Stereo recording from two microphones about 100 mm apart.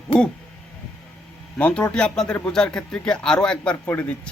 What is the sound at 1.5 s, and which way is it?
A man's voice, 10° left (ahead or behind).